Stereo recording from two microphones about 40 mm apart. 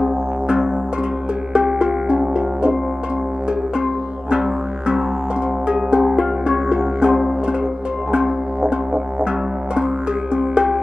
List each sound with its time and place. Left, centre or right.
0.0 s music: right
3.8 s music: right
8.1 s didgeridoo: right
10.3 s music: right